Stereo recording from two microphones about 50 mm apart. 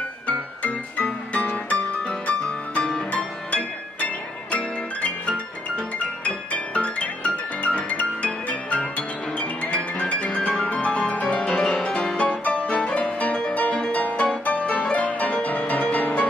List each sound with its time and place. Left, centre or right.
0.3 s music: left
12.2 s music: left